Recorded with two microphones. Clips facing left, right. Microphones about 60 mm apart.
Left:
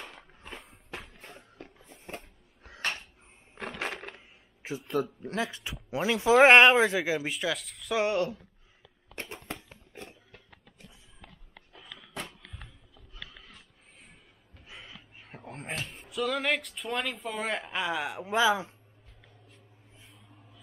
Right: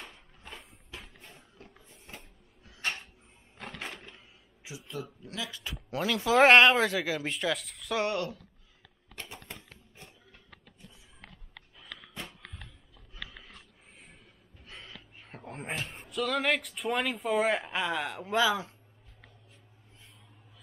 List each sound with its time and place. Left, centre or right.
1.2 s a sound: left
3.8 s crushing: left
4.6 s speech: left
5.6 s speech: centre
7.2 s speech: centre
7.9 s speech: centre
9.1 s a sound: left
11.7 s a sound: centre
14.7 s crow: centre
15.2 s speech: centre; by 18.8 s left